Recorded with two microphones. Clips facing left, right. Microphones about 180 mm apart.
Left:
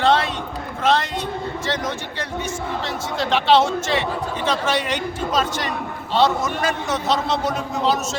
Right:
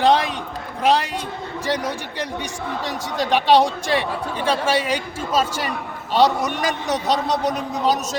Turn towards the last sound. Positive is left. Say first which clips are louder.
# right 1 dB
turn(degrees=-40)  # may be behind; listen again after turning